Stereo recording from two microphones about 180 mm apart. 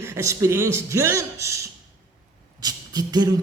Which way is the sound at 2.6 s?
20° right (ahead or behind).